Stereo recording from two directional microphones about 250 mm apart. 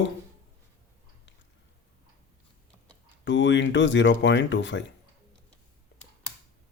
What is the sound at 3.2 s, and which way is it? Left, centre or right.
Speech, left.